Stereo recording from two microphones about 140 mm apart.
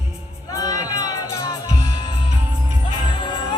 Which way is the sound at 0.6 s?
25° left (ahead or behind).